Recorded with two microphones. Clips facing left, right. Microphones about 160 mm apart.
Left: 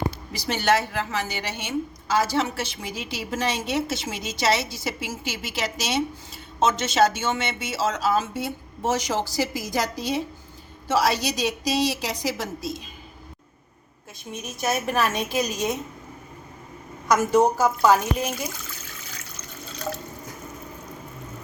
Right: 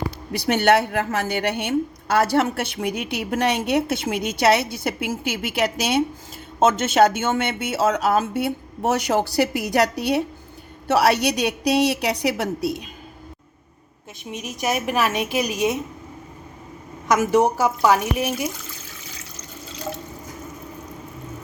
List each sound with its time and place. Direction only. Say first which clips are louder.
0.3 s a woman's voice: right 6 dB; 60° right (ahead or behind)
14.3 s a woman's voice: right 2 dB; 15° right (ahead or behind)
17.1 s a woman's voice: right 1 dB; 15° right (ahead or behind)